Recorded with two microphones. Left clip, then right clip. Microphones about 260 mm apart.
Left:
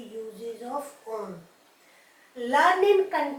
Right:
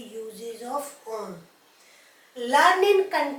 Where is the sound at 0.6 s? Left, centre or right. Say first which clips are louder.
Right 4 dB; centre.